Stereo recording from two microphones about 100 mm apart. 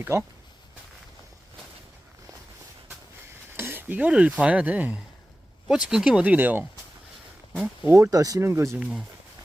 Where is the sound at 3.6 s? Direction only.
20° right (ahead or behind).